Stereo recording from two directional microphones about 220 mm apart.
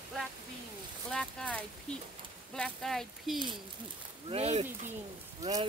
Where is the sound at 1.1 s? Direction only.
5° left (ahead or behind).